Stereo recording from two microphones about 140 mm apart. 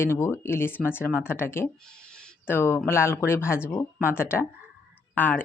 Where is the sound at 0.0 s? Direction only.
15° left (ahead or behind).